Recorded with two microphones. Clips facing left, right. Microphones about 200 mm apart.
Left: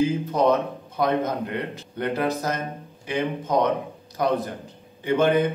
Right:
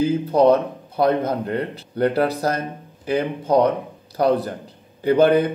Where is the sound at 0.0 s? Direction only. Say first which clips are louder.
Right 5 dB; 35° right (ahead or behind).